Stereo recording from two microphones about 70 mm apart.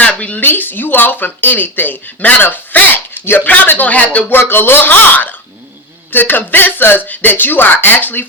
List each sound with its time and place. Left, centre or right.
0.0 s a sound: centre
0.4 s speech: left
4.3 s speech: left